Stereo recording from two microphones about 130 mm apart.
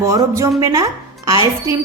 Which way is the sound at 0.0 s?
25° right (ahead or behind).